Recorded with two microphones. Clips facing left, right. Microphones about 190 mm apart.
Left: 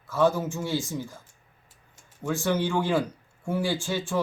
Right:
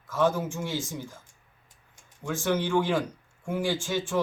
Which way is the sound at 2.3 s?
10° left (ahead or behind).